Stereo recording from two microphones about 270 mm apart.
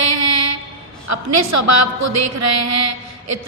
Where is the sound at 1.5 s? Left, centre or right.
Right.